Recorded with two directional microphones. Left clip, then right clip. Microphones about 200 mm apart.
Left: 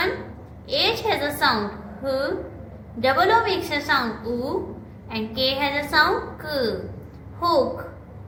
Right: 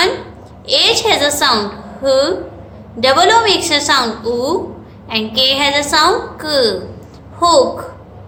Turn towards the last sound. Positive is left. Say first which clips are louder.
# right 10 dB
turn(degrees=-50)  # may be behind; listen again after turning